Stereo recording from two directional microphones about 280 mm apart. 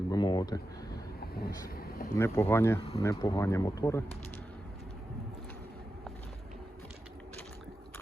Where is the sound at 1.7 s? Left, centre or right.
Left.